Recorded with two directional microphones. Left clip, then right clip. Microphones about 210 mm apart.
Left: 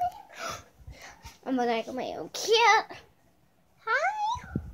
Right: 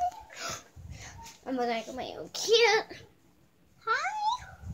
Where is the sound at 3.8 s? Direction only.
50° left (ahead or behind).